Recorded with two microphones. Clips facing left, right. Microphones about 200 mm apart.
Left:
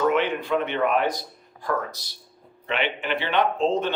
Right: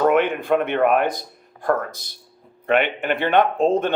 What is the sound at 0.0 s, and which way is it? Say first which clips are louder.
Speech: right 4 dB; 55° right (ahead or behind).